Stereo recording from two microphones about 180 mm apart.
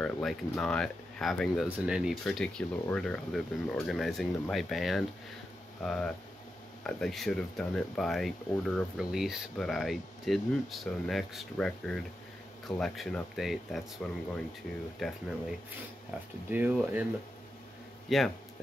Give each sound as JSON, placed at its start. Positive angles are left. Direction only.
{"t": 0.0, "sound": "speech", "side_deg": 5}
{"t": 15.0, "sound": "speech", "side_deg": 0}
{"t": 16.4, "sound": "speech", "side_deg": -10}
{"t": 18.1, "sound": "speech", "side_deg": 0}